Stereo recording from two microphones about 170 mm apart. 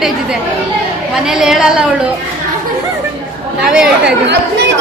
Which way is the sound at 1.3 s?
5° right (ahead or behind).